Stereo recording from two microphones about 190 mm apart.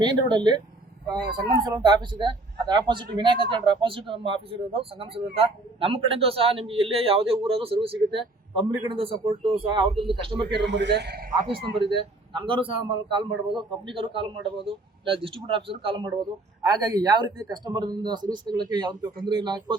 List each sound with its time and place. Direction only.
0.0 s speech: 25° right (ahead or behind)
1.6 s speech: 25° right (ahead or behind)
10.5 s a man's voice: 65° right (ahead or behind)
12.3 s speech: 25° right (ahead or behind)